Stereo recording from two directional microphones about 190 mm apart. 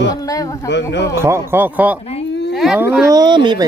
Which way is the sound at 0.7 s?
65° left (ahead or behind).